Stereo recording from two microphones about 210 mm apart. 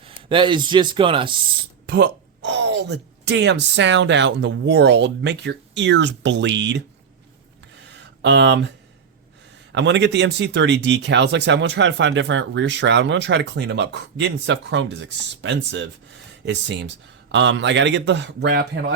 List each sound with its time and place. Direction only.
0.2 s speech: 25° right (ahead or behind)
1.9 s speech: 55° right (ahead or behind)
7.8 s a sound: 55° right (ahead or behind)
9.7 s speech: 55° right (ahead or behind)